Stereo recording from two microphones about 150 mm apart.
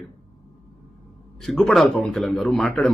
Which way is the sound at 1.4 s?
5° left (ahead or behind).